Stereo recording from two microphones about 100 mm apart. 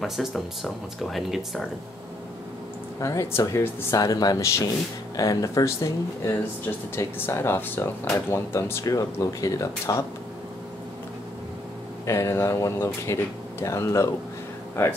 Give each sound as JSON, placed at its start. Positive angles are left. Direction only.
{"t": 0.0, "sound": "speech", "side_deg": 0}
{"t": 3.0, "sound": "speech", "side_deg": 30}
{"t": 7.0, "sound": "speech", "side_deg": 25}
{"t": 12.1, "sound": "speech", "side_deg": 30}